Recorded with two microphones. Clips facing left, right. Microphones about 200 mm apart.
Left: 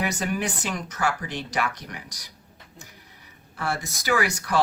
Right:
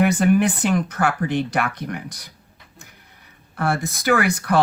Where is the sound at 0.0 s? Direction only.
55° right (ahead or behind).